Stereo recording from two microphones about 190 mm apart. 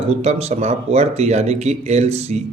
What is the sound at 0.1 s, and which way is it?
A man's voice, 35° right (ahead or behind).